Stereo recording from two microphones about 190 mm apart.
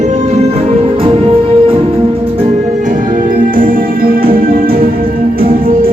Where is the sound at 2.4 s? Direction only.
40° right (ahead or behind).